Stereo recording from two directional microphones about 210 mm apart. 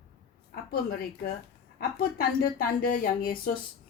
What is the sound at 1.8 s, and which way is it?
A woman's voice, 45° left (ahead or behind).